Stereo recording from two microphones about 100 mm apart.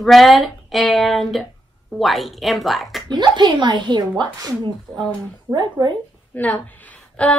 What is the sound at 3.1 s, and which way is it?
Speech, 45° right (ahead or behind).